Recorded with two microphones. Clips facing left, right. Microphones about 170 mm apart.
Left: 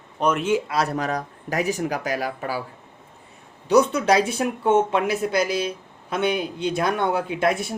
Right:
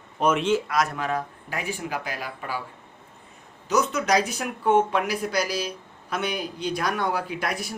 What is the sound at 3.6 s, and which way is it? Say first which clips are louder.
Speech: left 6 dB; 30° left (ahead or behind).